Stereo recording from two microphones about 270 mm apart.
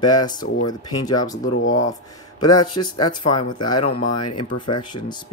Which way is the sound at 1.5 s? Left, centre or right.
Left.